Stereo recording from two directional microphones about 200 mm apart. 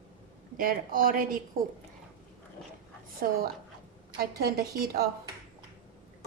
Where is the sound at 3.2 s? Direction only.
45° right (ahead or behind).